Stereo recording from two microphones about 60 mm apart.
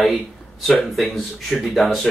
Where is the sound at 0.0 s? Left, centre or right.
Centre.